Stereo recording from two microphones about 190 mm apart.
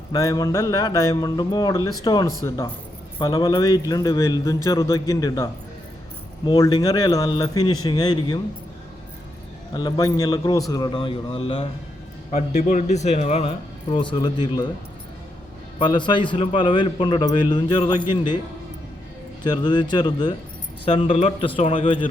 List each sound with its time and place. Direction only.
0.1 s a man's voice: 20° left (ahead or behind)
9.7 s a man's voice: 20° left (ahead or behind)
15.8 s a man's voice: 25° left (ahead or behind)
19.5 s a man's voice: 25° left (ahead or behind)